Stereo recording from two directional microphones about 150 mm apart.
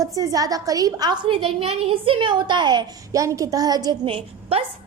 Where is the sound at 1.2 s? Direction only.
35° right (ahead or behind).